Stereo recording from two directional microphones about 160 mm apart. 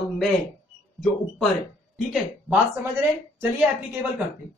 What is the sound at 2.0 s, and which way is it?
Speech, centre (ahead or behind).